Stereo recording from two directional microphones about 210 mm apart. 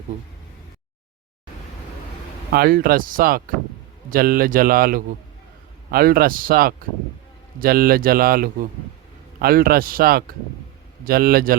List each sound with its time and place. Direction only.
2.5 s speech: 45° right (ahead or behind)